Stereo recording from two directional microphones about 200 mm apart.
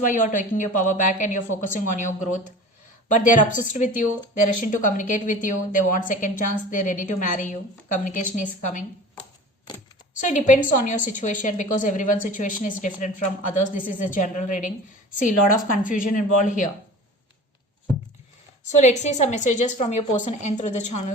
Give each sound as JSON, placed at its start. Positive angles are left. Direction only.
{"t": 0.0, "sound": "a woman's voice", "side_deg": 40}
{"t": 9.7, "sound": "a sound", "side_deg": 20}
{"t": 10.2, "sound": "a woman's voice", "side_deg": 40}
{"t": 18.8, "sound": "a woman's voice", "side_deg": 35}